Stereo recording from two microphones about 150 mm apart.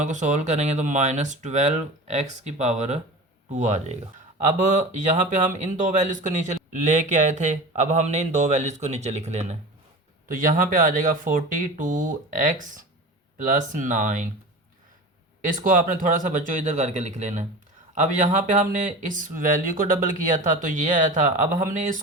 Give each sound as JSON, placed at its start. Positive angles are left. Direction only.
{"t": 0.0, "sound": "speech", "side_deg": -55}
{"t": 10.2, "sound": "speech", "side_deg": -65}
{"t": 15.4, "sound": "speech", "side_deg": -60}